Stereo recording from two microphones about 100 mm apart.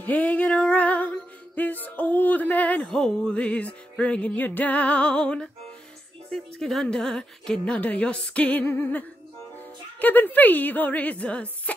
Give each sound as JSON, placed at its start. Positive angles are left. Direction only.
{"t": 0.0, "sound": "music", "side_deg": 15}
{"t": 6.3, "sound": "speech", "side_deg": 5}